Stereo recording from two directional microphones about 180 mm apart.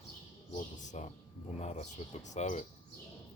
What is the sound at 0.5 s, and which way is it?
Speech, 40° left (ahead or behind).